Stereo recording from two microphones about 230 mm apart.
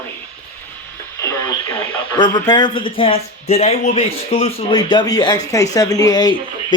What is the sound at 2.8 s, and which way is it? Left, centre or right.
Speech, left.